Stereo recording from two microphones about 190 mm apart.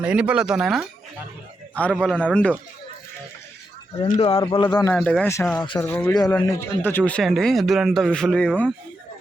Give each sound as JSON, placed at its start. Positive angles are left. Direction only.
{"t": 0.0, "sound": "speech", "side_deg": -5}
{"t": 1.7, "sound": "a man's voice", "side_deg": 5}
{"t": 4.2, "sound": "speech", "side_deg": 30}
{"t": 4.9, "sound": "speech", "side_deg": 5}